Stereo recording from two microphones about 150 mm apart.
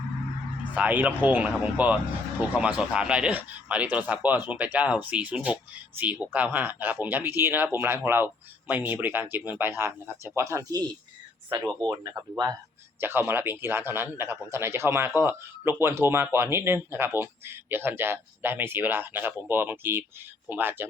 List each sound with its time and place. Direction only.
0.8 s a man's voice: 10° right (ahead or behind); by 12.1 s 25° right (ahead or behind)
13.0 s a man's voice: 15° right (ahead or behind)